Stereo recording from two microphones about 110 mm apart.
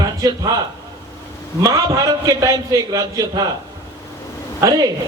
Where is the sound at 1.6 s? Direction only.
35° right (ahead or behind).